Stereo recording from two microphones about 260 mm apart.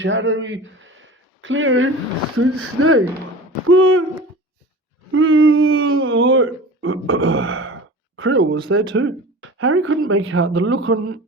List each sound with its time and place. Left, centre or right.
0.0 s speech: right
3.7 s owl: right
5.1 s speech: right